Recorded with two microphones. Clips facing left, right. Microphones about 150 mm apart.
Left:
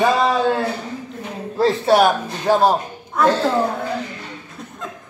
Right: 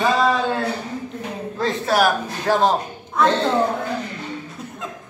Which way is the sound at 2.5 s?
10° left (ahead or behind).